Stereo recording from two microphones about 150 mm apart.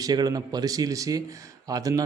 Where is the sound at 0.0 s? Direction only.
25° right (ahead or behind).